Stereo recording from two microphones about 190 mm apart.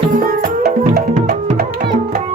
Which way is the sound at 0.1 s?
50° right (ahead or behind).